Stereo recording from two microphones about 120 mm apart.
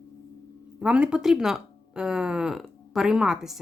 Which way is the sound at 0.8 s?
10° right (ahead or behind).